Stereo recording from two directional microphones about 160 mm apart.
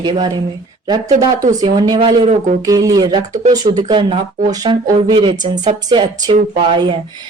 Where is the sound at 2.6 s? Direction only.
20° right (ahead or behind).